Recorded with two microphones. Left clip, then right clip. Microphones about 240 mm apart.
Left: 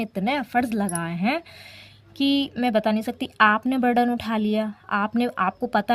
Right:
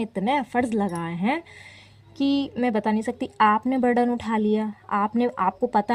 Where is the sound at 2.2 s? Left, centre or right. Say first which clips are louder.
Left 1 dB; left.